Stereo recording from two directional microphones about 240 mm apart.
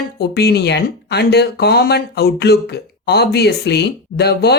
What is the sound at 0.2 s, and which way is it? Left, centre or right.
Speech, left.